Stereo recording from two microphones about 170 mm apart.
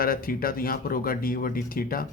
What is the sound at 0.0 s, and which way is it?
Speech, 60° left (ahead or behind).